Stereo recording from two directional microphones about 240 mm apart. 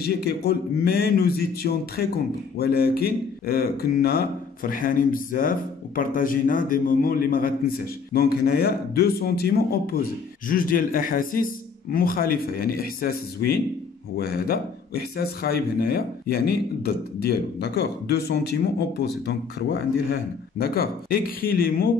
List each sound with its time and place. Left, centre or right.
0.0 s a man's voice: left